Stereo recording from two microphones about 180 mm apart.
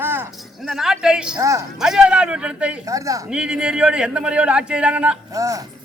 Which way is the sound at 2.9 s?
20° right (ahead or behind).